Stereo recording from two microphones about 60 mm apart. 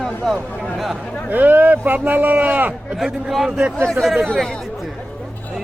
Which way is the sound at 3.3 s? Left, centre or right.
Centre.